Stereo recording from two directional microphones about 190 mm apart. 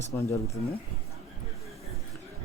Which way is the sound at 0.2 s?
15° left (ahead or behind).